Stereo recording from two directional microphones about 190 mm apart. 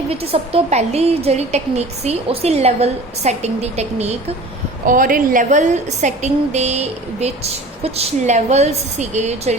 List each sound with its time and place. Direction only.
0.1 s a woman's voice: 30° right (ahead or behind)
4.9 s a woman's voice: 45° right (ahead or behind)